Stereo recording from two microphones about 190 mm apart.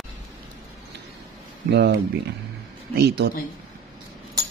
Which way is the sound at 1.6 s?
55° right (ahead or behind).